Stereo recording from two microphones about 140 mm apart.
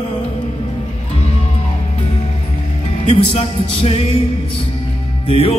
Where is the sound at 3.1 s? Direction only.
45° left (ahead or behind).